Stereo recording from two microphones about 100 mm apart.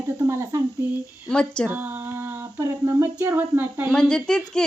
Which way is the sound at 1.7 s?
20° right (ahead or behind).